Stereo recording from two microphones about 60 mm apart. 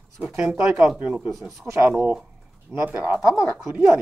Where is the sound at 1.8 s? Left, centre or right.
Right.